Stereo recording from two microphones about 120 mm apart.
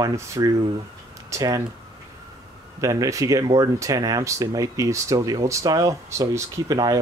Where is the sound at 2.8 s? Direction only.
25° right (ahead or behind).